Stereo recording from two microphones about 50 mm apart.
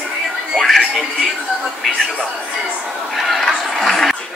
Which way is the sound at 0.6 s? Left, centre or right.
Centre.